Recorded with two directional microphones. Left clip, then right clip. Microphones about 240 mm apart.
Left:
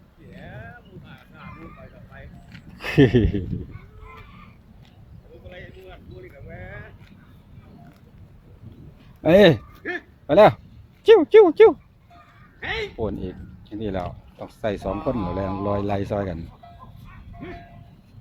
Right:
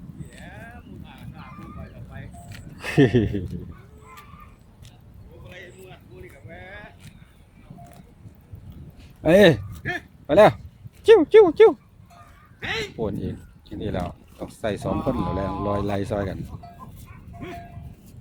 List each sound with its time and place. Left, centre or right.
0.3 s a sound: right
2.1 s vehicle: right
2.7 s speech: centre
5.5 s a sound: right
9.2 s speech: centre
9.8 s a sound: right
10.2 s speech: centre
12.5 s goose: right
13.0 s speech: centre
15.1 s speech: right
15.6 s speech: centre